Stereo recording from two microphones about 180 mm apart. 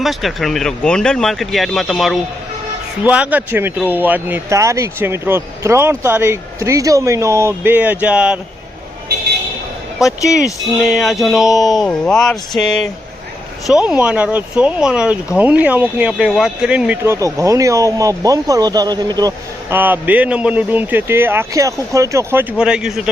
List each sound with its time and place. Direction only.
0.0 s speech: centre (ahead or behind)
10.1 s speech: 20° left (ahead or behind)
10.4 s speech: centre (ahead or behind)
11.5 s speech: 20° left (ahead or behind)
11.9 s speech: 5° left (ahead or behind)
13.7 s speech: 5° right (ahead or behind); by 19.3 s 20° right (ahead or behind)
19.7 s speech: 10° right (ahead or behind)